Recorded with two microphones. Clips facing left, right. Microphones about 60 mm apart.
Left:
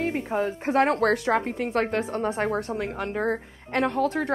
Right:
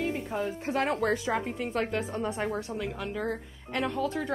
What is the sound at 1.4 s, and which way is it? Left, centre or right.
A woman's voice, left.